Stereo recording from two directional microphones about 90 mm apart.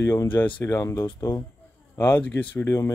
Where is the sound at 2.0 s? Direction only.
20° left (ahead or behind).